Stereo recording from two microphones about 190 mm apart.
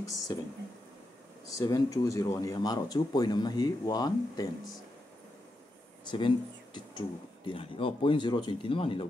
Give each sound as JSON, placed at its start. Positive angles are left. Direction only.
{"t": 0.0, "sound": "speech", "side_deg": 15}
{"t": 1.5, "sound": "speech", "side_deg": 15}
{"t": 6.0, "sound": "speech", "side_deg": 25}